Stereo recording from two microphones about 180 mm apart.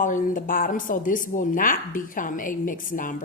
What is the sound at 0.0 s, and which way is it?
Speech, 45° left (ahead or behind).